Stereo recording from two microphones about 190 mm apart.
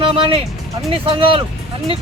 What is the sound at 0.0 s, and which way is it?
Speech, 30° right (ahead or behind).